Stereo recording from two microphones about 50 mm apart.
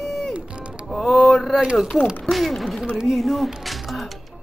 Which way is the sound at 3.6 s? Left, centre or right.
Centre.